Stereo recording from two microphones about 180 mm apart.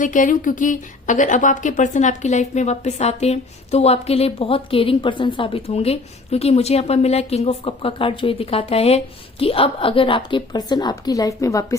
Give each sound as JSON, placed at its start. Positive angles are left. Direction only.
{"t": 0.0, "sound": "a woman's voice", "side_deg": 45}